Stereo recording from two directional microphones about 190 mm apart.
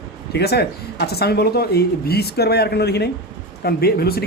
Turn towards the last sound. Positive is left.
turn(degrees=55)  # may be behind; listen again after turning